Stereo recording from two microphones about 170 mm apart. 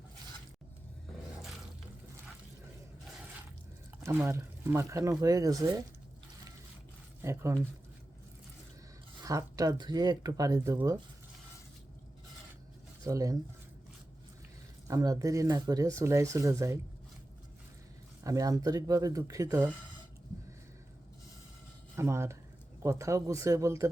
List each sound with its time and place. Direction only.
4.0 s speech: 15° right (ahead or behind)
7.2 s speech: 15° right (ahead or behind)
9.2 s speech: 20° right (ahead or behind)
13.1 s speech: 20° right (ahead or behind)
14.8 s speech: 20° right (ahead or behind)
18.2 s speech: 20° right (ahead or behind)
21.9 s speech: 15° right (ahead or behind)